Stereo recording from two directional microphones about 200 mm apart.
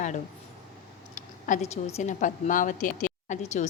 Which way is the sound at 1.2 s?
40° left (ahead or behind).